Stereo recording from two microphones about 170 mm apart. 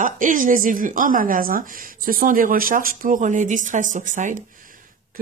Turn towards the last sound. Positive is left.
turn(degrees=-50)  # may be behind; listen again after turning